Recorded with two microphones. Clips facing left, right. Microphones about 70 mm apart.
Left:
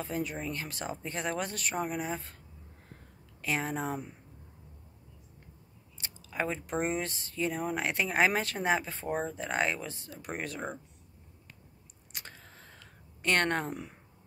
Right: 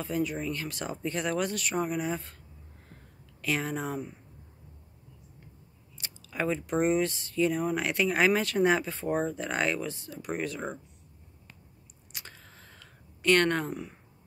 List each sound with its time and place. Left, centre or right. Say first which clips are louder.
0.0 s speech: right 4 dB; left
3.4 s speech: right 1 dB; left
5.9 s biting: right 1 dB; left
6.6 s speech: right 6 dB; left
8.5 s speech: right 5 dB; left
12.1 s a sound: even; left